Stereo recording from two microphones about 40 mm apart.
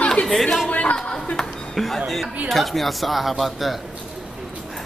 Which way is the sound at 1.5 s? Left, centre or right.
Left.